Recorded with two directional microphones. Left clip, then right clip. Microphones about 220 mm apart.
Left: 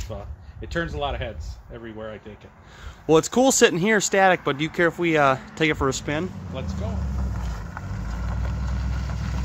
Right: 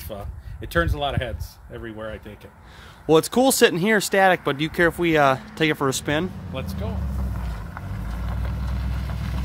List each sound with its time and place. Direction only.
0.1 s speech: 50° right (ahead or behind)
3.1 s speech: 5° right (ahead or behind)
6.5 s speech: 55° right (ahead or behind)
7.2 s vehicle: 5° left (ahead or behind)